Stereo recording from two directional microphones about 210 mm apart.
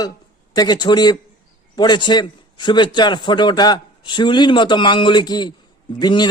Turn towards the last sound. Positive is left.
turn(degrees=20)  # may be behind; listen again after turning